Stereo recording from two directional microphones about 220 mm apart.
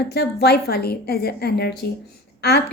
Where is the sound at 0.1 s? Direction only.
50° left (ahead or behind).